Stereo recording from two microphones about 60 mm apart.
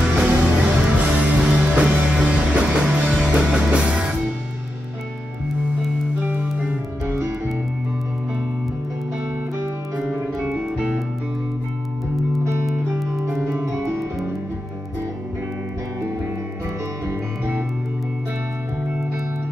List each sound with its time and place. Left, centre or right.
0.0 s music: centre
6.2 s music: right
10.5 s music: centre
12.6 s music: centre
13.5 s music: right